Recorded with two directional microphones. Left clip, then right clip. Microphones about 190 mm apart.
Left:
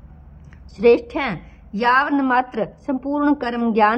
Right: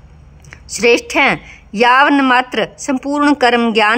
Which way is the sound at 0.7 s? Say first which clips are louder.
Right 3 dB; 10° right (ahead or behind).